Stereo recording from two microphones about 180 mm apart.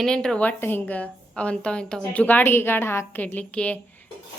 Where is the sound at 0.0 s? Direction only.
5° left (ahead or behind).